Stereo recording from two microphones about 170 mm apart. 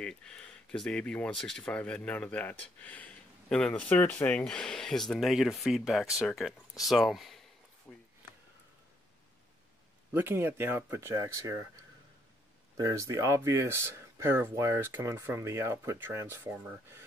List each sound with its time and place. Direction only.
0.0 s speech: 5° left (ahead or behind)
7.9 s a sound: 5° left (ahead or behind)
10.1 s speech: 15° right (ahead or behind)
12.7 s speech: 20° right (ahead or behind)